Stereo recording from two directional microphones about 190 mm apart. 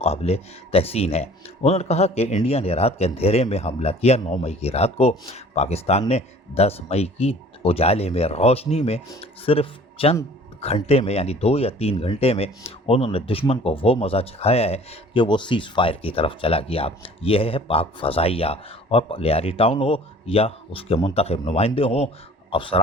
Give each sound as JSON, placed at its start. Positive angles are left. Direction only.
{"t": 0.0, "sound": "speech", "side_deg": 35}